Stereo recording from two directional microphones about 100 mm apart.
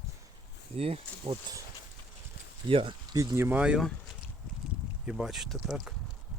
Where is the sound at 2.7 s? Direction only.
65° right (ahead or behind).